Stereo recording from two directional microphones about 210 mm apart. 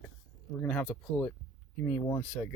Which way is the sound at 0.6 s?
5° left (ahead or behind).